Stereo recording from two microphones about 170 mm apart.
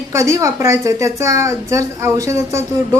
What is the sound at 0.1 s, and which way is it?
A woman's voice, 20° right (ahead or behind).